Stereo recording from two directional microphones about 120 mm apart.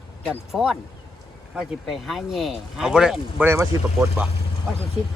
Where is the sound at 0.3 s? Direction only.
5° right (ahead or behind).